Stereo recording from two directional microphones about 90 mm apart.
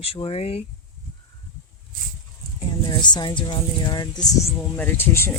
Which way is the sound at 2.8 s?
55° left (ahead or behind).